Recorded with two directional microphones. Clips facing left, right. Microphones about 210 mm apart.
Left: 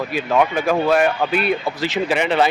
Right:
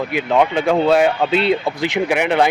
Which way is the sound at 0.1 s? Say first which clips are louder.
Right 2 dB; 20° right (ahead or behind).